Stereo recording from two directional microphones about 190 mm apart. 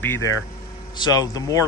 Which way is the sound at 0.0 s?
10° left (ahead or behind).